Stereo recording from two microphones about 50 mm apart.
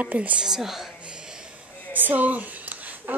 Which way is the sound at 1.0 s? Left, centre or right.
Centre.